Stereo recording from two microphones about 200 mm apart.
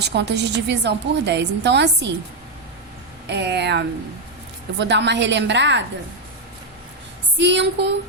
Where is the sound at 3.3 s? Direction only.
60° right (ahead or behind).